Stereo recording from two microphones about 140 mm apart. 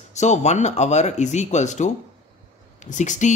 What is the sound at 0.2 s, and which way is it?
Speech, 55° left (ahead or behind).